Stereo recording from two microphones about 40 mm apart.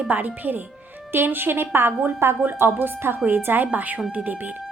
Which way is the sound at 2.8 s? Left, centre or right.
Right.